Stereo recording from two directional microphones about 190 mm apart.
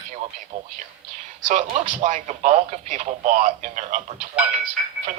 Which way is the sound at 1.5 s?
40° right (ahead or behind).